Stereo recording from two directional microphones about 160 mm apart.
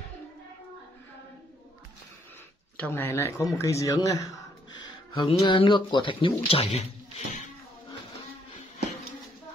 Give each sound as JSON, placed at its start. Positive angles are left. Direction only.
{"t": 2.8, "sound": "speech", "side_deg": 15}